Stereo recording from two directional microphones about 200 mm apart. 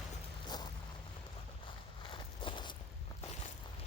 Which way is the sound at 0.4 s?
20° left (ahead or behind).